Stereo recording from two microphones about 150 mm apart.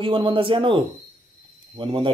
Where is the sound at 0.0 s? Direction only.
35° right (ahead or behind).